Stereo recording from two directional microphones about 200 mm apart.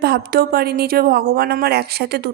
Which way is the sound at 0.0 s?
50° right (ahead or behind).